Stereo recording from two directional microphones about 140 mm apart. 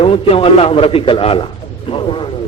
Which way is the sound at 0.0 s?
40° left (ahead or behind).